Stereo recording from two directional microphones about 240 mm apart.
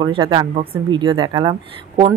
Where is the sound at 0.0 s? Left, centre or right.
Centre.